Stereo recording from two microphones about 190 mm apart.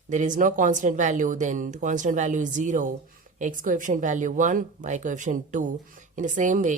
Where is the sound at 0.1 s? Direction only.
40° right (ahead or behind).